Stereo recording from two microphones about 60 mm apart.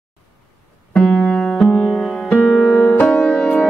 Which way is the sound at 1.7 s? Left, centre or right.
Centre.